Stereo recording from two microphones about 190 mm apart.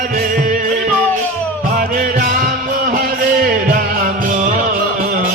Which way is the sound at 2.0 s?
45° right (ahead or behind).